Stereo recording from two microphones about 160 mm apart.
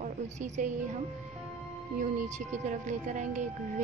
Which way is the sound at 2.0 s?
50° right (ahead or behind).